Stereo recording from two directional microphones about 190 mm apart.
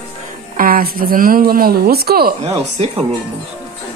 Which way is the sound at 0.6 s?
50° right (ahead or behind).